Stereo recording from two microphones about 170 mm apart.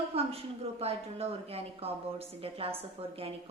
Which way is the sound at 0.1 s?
35° right (ahead or behind).